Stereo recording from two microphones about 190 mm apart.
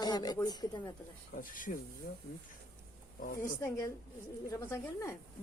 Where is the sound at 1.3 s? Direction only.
45° left (ahead or behind).